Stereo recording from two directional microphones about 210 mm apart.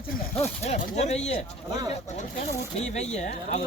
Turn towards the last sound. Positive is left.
turn(degrees=35)  # may be behind; listen again after turning